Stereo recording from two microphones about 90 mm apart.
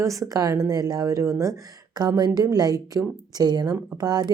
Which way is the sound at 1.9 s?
45° right (ahead or behind).